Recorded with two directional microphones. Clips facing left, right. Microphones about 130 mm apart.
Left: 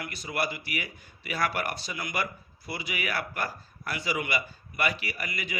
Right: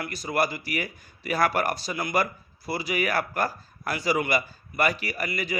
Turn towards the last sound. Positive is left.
turn(degrees=-40)  # may be behind; listen again after turning